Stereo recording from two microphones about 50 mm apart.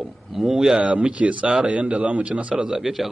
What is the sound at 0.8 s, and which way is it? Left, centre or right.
Speech, right.